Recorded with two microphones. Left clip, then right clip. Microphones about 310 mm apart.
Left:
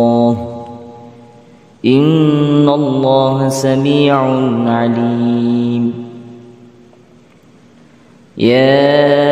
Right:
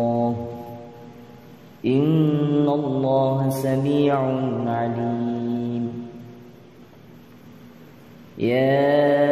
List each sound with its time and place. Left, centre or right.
0.0 s mantra: left
1.8 s mantra: left
8.4 s mantra: left